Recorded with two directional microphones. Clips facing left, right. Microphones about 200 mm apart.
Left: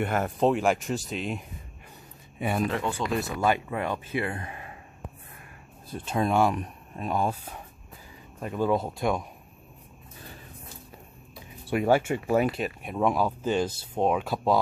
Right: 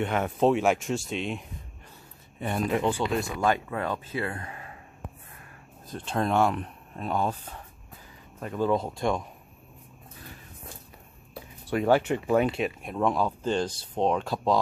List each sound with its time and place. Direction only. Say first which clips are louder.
0.0 s a man's voice: right 1 dB; centre (ahead or behind)
2.7 s speech: right 4 dB; 20° right (ahead or behind)
3.2 s speech: even; 5° left (ahead or behind); by 4.6 s 20° left (ahead or behind)
5.9 s speech: left 1 dB; 10° left (ahead or behind)
11.7 s speech: even; 10° left (ahead or behind)